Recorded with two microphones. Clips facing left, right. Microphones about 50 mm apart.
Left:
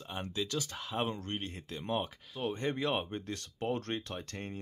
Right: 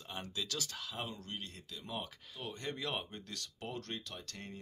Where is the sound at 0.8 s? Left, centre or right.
Left.